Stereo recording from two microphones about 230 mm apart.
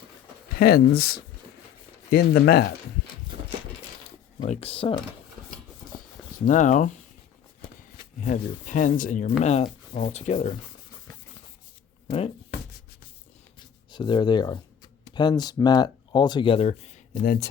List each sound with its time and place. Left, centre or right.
0.6 s speech: left
4.4 s speech: left
6.4 s speech: left
8.2 s speech: left
13.9 s speech: centre